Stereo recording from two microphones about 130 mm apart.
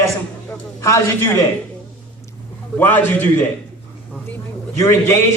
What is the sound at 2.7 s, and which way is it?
Speech, 15° left (ahead or behind).